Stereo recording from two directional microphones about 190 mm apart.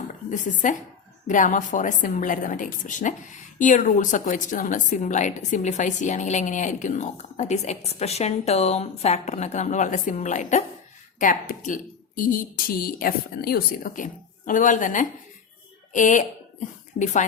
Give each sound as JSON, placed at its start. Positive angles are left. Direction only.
{"t": 0.3, "sound": "a woman's voice", "side_deg": 45}